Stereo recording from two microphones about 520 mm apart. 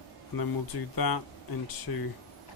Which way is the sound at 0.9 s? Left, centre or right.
Left.